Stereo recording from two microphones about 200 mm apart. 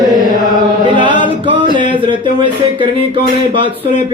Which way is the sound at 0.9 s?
25° right (ahead or behind).